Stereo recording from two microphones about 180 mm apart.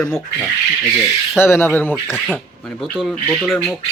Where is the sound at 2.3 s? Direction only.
5° right (ahead or behind).